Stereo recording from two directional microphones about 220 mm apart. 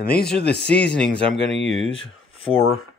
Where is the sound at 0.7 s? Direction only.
5° left (ahead or behind).